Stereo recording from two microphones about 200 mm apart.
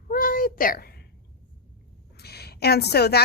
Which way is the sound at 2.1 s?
55° left (ahead or behind).